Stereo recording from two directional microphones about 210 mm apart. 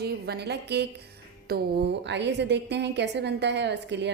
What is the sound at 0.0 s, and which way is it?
A woman's voice, 50° right (ahead or behind).